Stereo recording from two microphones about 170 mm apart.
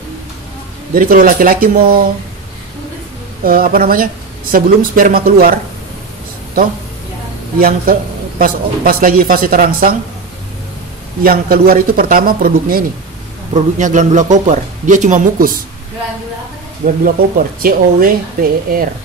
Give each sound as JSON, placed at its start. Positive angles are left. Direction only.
{"t": 0.9, "sound": "a man's voice", "side_deg": -55}
{"t": 3.4, "sound": "a man's voice", "side_deg": -60}
{"t": 7.5, "sound": "a man's voice", "side_deg": -60}
{"t": 11.2, "sound": "a man's voice", "side_deg": -60}
{"t": 13.5, "sound": "a man's voice", "side_deg": -45}
{"t": 16.8, "sound": "a man's voice", "side_deg": -55}